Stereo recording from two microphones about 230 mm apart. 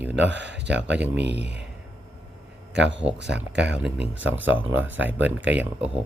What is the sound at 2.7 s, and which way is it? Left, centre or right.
Speech, right.